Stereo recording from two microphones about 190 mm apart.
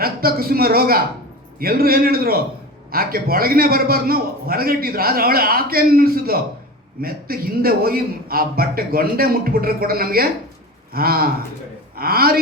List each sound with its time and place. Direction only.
0.0 s a man's voice: 50° right (ahead or behind)